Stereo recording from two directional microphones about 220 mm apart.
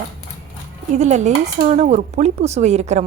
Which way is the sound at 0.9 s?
30° right (ahead or behind).